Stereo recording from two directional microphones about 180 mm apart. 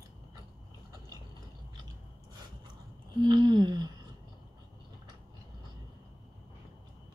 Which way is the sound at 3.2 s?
25° right (ahead or behind).